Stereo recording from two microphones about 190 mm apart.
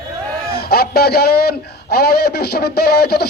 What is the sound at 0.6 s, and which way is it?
Speech, 55° left (ahead or behind).